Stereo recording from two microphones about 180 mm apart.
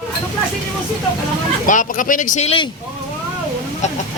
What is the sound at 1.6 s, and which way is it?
Speech, 45° left (ahead or behind).